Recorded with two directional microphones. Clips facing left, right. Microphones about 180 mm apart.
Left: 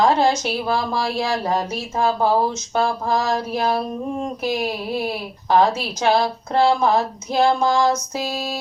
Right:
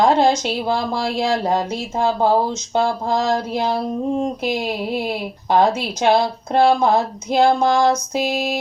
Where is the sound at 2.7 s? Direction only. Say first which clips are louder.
Right 3 dB; 20° right (ahead or behind).